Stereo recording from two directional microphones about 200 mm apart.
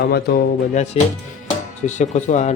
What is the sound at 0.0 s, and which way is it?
Music, 50° left (ahead or behind).